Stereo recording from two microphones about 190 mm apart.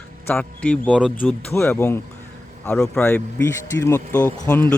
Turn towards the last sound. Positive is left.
turn(degrees=10)  # may be behind; listen again after turning